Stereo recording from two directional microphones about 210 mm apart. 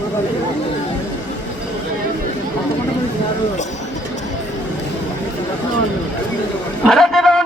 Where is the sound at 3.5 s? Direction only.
35° left (ahead or behind).